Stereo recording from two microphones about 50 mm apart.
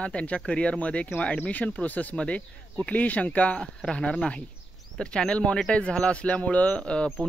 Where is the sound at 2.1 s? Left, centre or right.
Left.